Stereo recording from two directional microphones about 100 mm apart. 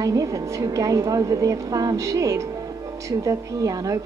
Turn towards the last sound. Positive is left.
turn(degrees=-35)  # may be behind; listen again after turning